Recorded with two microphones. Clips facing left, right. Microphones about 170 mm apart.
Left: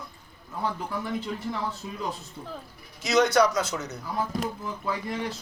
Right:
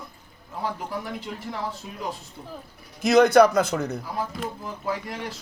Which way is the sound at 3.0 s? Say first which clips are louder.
Right 6 dB; 55° right (ahead or behind).